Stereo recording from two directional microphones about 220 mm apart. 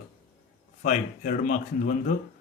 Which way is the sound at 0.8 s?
35° left (ahead or behind).